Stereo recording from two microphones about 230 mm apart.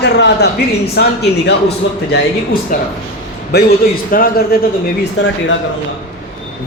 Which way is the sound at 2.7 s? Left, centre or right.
Left.